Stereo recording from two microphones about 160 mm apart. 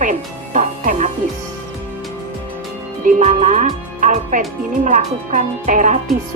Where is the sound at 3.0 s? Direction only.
55° right (ahead or behind).